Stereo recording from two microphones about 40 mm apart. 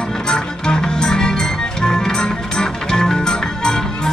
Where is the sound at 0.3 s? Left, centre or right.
Centre.